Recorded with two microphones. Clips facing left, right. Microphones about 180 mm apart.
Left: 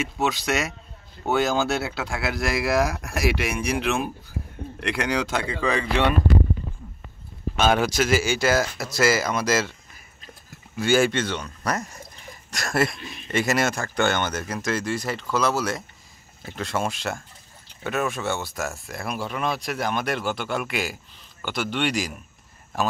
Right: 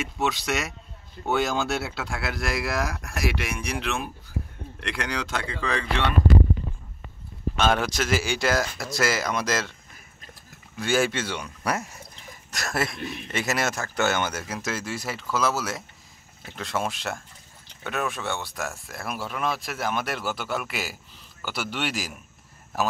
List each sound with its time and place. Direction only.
0.0 s speech: 5° left (ahead or behind)
7.5 s speech: 5° left (ahead or behind)
10.8 s speech: centre (ahead or behind)
12.9 s a man's voice: 60° right (ahead or behind)
13.3 s speech: centre (ahead or behind)